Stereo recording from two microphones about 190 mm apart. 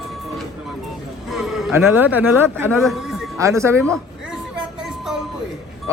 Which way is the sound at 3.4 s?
15° right (ahead or behind).